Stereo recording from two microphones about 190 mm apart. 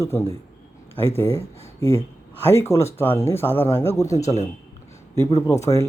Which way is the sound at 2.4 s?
15° left (ahead or behind).